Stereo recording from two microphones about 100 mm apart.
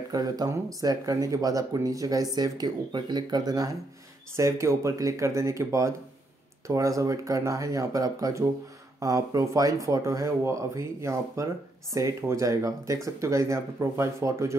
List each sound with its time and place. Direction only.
0.1 s speech: 40° right (ahead or behind)
4.4 s speech: 30° right (ahead or behind)